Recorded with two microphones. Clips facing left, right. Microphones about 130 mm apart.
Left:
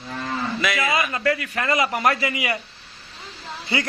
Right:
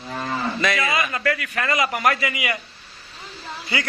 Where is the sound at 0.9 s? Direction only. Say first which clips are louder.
Left 1 dB; 25° left (ahead or behind).